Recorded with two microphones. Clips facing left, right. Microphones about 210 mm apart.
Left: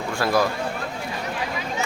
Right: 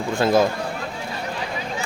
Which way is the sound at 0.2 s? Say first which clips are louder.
Right 4 dB; 20° right (ahead or behind).